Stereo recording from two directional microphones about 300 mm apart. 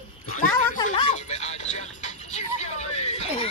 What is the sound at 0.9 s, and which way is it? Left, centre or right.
Music, left.